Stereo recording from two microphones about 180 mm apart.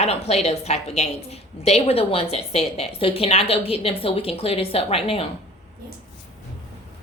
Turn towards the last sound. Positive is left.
turn(degrees=30)  # may be behind; listen again after turning